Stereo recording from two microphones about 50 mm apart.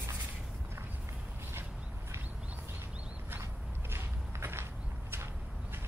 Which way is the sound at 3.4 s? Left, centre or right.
Right.